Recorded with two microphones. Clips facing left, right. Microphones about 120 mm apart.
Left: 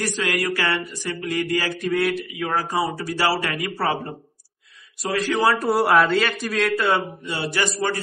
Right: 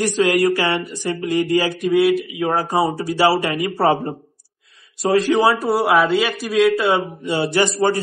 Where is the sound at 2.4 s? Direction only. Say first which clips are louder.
Right 3 dB; 25° right (ahead or behind).